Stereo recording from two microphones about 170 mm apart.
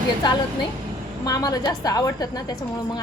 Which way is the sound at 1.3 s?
20° left (ahead or behind).